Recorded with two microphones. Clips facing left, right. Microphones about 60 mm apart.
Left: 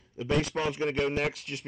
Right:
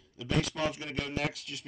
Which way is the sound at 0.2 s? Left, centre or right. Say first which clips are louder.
Left 5 dB; left.